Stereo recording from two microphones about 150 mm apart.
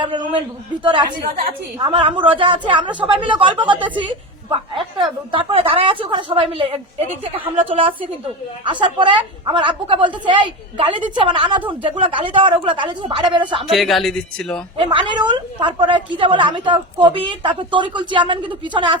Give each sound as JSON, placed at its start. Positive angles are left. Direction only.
{"t": 0.0, "sound": "a woman's voice", "side_deg": -30}
{"t": 1.8, "sound": "a woman's voice", "side_deg": -35}
{"t": 3.8, "sound": "a woman's voice", "side_deg": -10}
{"t": 4.5, "sound": "a woman's voice", "side_deg": -35}
{"t": 13.7, "sound": "speech", "side_deg": 0}
{"t": 14.8, "sound": "a woman's voice", "side_deg": -35}